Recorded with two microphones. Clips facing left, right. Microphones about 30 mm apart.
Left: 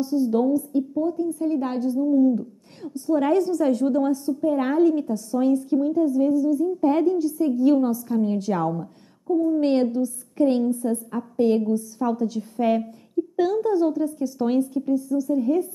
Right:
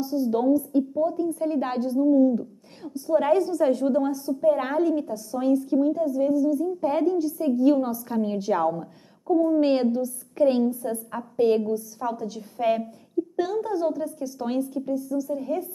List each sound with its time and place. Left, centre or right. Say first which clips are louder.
0.0 s a woman's voice: left 2 dB; centre
9.3 s a woman's voice: even; right
9.6 s a woman's voice: left 1 dB; centre